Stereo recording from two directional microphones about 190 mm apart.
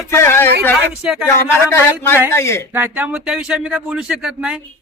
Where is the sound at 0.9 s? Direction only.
5° right (ahead or behind).